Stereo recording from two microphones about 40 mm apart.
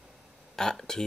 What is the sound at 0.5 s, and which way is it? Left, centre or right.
Speech, centre.